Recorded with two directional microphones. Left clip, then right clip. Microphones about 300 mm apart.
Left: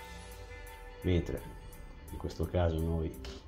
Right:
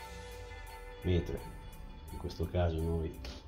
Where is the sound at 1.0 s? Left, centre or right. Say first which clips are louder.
Left 2 dB; left.